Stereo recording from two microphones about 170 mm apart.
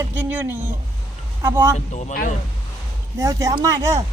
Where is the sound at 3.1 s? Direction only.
20° right (ahead or behind).